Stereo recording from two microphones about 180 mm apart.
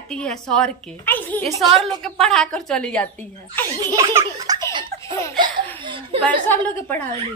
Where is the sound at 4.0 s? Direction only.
20° right (ahead or behind).